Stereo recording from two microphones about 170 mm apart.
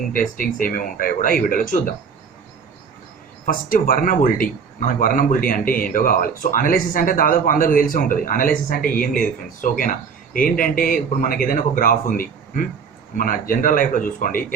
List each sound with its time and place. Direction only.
0.1 s speech: 55° left (ahead or behind)
3.4 s speech: 55° left (ahead or behind)